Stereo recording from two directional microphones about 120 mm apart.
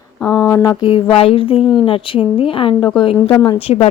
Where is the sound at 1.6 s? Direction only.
5° right (ahead or behind).